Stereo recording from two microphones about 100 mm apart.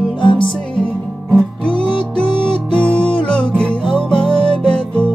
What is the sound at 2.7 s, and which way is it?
Music, 10° left (ahead or behind).